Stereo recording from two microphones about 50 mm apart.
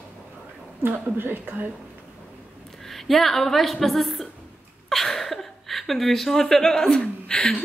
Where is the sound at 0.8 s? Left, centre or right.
Right.